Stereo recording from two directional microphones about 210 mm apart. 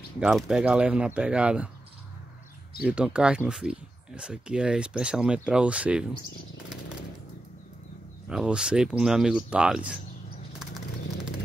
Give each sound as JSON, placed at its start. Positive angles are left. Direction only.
{"t": 0.2, "sound": "speech", "side_deg": -5}
{"t": 2.8, "sound": "speech", "side_deg": -5}
{"t": 8.3, "sound": "speech", "side_deg": -5}